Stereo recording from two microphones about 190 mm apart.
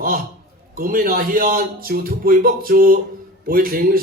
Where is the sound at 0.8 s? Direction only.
50° right (ahead or behind).